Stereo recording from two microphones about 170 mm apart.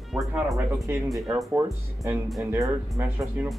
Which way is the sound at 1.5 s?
15° right (ahead or behind).